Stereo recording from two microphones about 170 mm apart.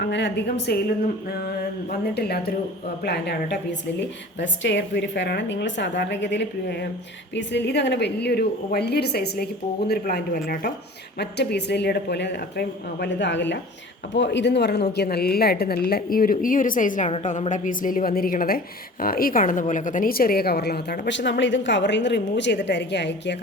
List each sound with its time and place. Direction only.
0.0 s a woman's voice: 90° left
1.9 s a woman's voice: 70° left (ahead or behind)
11.2 s a woman's voice: 80° left
14.9 s a woman's voice: 70° left (ahead or behind)
21.1 s a woman's voice: 90° left